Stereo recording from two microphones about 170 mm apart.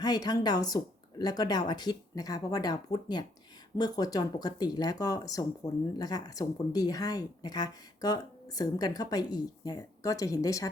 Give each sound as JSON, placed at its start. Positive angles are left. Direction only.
{"t": 0.0, "sound": "speech", "side_deg": 25}